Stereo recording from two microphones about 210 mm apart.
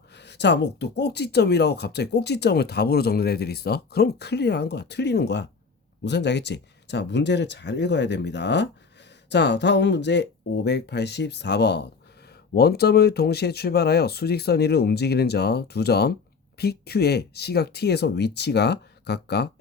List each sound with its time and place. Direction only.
0.1 s speech: 55° left (ahead or behind)